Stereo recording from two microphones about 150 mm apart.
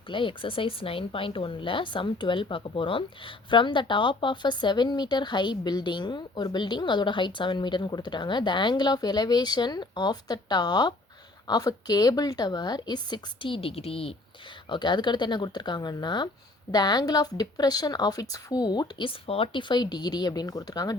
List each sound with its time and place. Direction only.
0.1 s speech: 35° left (ahead or behind)